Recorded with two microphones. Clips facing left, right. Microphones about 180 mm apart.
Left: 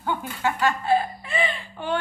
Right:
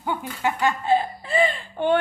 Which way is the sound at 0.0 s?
20° right (ahead or behind).